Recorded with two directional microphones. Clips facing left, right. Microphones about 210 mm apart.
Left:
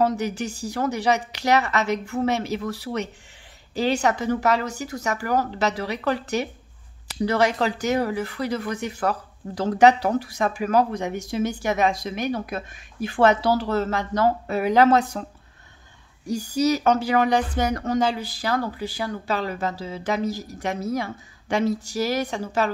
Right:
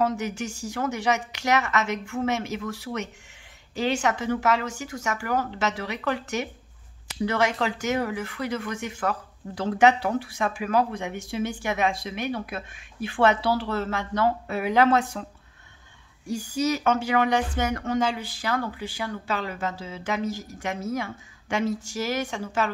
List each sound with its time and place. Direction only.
0.0 s speech: 35° left (ahead or behind)
16.3 s speech: 40° left (ahead or behind)